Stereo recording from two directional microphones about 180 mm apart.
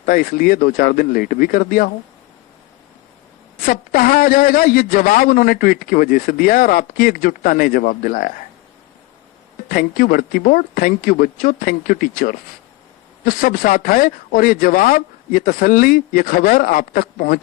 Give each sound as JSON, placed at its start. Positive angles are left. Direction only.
{"t": 0.0, "sound": "a man's voice", "side_deg": 50}
{"t": 3.7, "sound": "a man's voice", "side_deg": 50}
{"t": 9.6, "sound": "a man's voice", "side_deg": 50}